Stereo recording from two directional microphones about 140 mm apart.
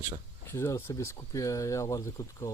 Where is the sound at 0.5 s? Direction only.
20° left (ahead or behind).